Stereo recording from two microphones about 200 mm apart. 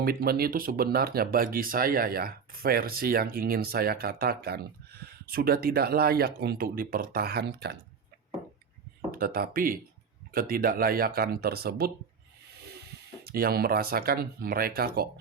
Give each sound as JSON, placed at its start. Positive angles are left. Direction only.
{"t": 0.0, "sound": "speech", "side_deg": -50}
{"t": 9.1, "sound": "speech", "side_deg": -50}
{"t": 13.2, "sound": "speech", "side_deg": -50}